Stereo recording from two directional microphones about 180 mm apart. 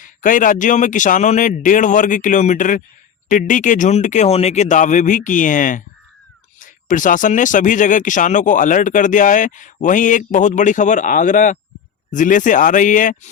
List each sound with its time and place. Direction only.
0.0 s speech: 45° left (ahead or behind)